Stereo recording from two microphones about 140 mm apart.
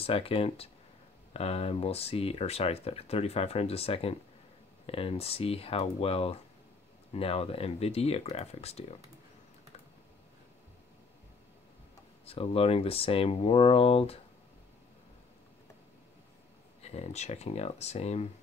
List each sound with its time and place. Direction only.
0.0 s speech: 45° left (ahead or behind)
12.3 s speech: 45° left (ahead or behind)
16.8 s speech: 50° left (ahead or behind)